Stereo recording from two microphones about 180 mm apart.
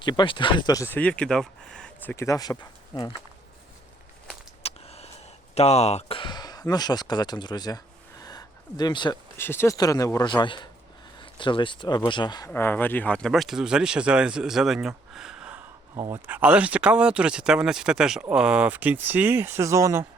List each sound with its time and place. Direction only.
0.0 s speech: 25° left (ahead or behind)
4.6 s a sound: 35° left (ahead or behind)
5.5 s speech: 35° left (ahead or behind)
8.2 s a sound: 20° left (ahead or behind)
9.4 s speech: 10° left (ahead or behind)
12.5 s speech: 10° left (ahead or behind); by 20.1 s 15° right (ahead or behind)